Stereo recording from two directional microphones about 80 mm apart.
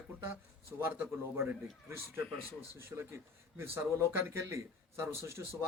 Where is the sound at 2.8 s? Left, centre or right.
Right.